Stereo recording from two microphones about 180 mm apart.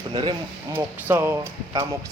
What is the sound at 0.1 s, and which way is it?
Speech, 25° right (ahead or behind).